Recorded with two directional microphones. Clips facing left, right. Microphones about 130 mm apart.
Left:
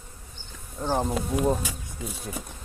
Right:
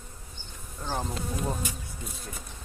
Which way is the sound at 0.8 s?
30° left (ahead or behind).